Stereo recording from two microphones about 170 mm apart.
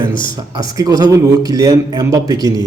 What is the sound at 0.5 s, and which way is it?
A man's voice, 20° right (ahead or behind).